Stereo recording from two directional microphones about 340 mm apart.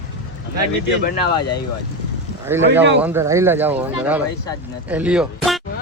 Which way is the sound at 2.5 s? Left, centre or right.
Centre.